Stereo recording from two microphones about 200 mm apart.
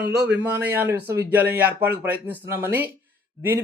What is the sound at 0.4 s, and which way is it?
A man's voice, 10° right (ahead or behind).